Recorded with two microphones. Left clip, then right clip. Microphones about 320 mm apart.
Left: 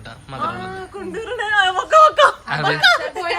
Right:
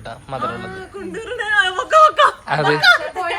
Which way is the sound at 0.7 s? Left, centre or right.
Left.